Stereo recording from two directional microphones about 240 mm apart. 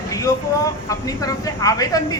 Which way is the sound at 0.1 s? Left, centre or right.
Centre.